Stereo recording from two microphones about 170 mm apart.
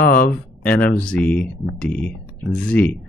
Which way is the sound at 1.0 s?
5° left (ahead or behind).